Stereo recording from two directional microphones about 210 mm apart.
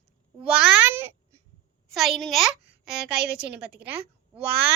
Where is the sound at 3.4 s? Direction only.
50° right (ahead or behind).